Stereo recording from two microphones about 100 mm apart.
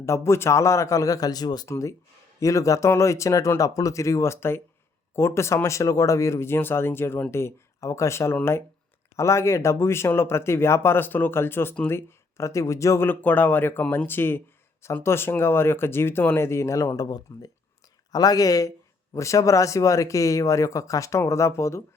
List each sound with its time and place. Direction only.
0.3 s speech: 25° left (ahead or behind); by 1.6 s 40° left (ahead or behind)
1.6 s speech: 30° left (ahead or behind)